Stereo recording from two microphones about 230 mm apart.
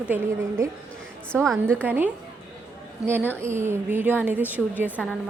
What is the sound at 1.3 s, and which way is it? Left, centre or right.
Speech, centre.